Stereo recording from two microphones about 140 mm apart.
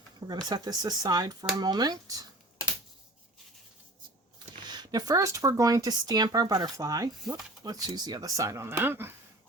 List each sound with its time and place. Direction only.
0.3 s speech: 30° right (ahead or behind)
4.6 s speech: 30° right (ahead or behind)